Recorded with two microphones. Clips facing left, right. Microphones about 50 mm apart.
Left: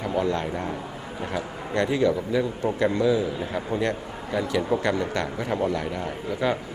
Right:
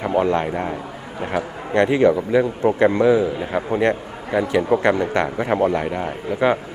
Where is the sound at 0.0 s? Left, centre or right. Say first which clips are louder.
Right 6 dB; right.